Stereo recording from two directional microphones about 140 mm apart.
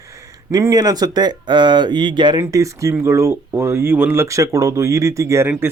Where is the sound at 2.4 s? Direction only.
20° right (ahead or behind).